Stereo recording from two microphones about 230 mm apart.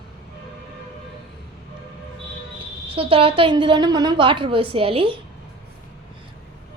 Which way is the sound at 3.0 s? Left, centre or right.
Right.